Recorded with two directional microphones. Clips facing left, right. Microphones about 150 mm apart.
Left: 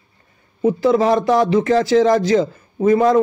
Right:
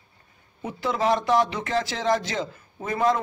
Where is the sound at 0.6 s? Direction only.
35° left (ahead or behind).